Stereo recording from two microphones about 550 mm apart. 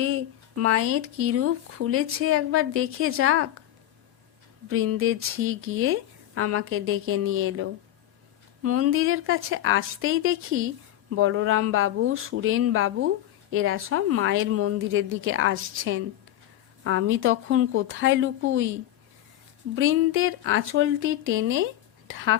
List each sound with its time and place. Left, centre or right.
0.0 s speech: right
4.7 s speech: right
19.7 s speech: right